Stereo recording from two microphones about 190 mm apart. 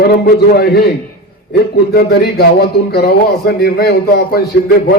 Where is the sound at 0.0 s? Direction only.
55° left (ahead or behind).